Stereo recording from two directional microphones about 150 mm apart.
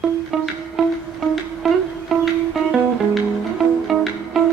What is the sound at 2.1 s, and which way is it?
Music, centre (ahead or behind).